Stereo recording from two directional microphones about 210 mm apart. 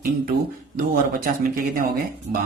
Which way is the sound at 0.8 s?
45° right (ahead or behind).